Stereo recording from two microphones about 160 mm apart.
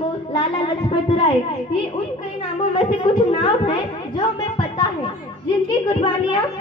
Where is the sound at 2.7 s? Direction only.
30° left (ahead or behind).